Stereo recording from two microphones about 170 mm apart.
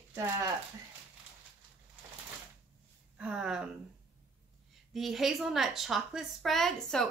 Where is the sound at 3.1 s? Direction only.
5° right (ahead or behind).